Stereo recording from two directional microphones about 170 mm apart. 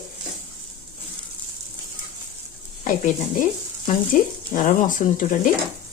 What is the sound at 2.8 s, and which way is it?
Speech, 50° left (ahead or behind).